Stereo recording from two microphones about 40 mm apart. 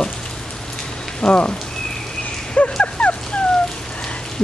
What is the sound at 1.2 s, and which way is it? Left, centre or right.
Speech, left.